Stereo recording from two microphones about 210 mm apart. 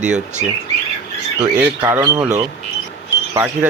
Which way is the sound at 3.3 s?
15° right (ahead or behind).